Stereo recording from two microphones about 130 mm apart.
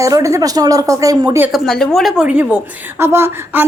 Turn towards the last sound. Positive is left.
turn(degrees=-20)  # may be behind; listen again after turning